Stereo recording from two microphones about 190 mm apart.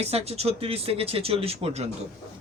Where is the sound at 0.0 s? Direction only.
35° right (ahead or behind).